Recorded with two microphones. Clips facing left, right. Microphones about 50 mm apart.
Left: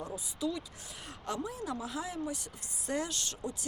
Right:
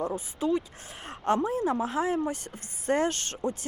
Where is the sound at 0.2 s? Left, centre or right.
Right.